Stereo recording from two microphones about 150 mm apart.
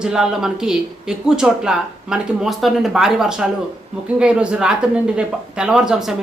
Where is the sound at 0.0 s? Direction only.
5° right (ahead or behind).